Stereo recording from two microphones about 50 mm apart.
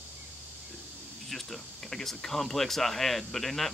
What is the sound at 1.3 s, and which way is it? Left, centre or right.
Speech, centre.